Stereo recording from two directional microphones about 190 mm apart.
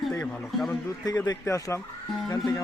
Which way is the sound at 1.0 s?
20° left (ahead or behind).